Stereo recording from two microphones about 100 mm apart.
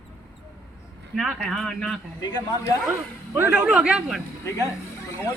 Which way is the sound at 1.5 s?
5° left (ahead or behind).